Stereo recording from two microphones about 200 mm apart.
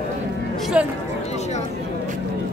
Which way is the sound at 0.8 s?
5° right (ahead or behind).